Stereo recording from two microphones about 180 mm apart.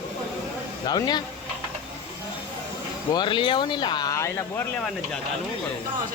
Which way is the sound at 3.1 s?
25° left (ahead or behind).